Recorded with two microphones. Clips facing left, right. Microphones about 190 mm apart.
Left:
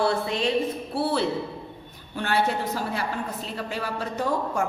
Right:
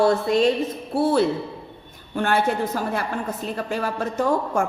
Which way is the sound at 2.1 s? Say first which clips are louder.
Right 4 dB; 50° right (ahead or behind).